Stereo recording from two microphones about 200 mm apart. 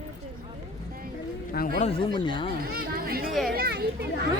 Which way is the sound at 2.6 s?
50° right (ahead or behind).